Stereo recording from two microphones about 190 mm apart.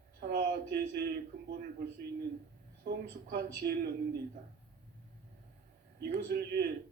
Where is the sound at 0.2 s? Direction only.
50° right (ahead or behind).